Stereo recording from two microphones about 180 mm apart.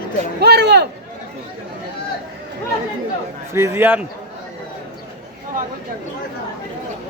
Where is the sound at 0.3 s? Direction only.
65° right (ahead or behind).